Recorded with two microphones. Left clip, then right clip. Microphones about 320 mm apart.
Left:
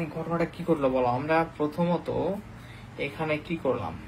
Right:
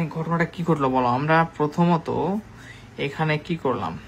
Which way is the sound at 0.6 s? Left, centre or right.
Right.